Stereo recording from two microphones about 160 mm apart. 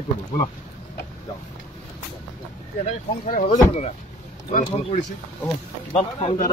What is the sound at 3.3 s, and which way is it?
Speech, 60° left (ahead or behind).